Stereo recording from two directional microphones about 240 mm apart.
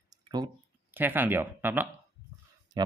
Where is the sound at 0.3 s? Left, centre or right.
Centre.